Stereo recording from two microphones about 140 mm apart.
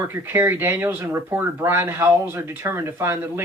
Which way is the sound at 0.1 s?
15° right (ahead or behind).